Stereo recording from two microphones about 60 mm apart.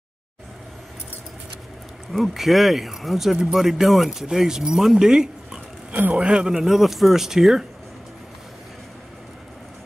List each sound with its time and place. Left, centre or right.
2.1 s speech: centre
5.9 s a man's voice: right
6.2 s a man's voice: centre